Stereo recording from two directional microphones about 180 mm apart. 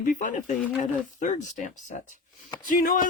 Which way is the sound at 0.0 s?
45° left (ahead or behind).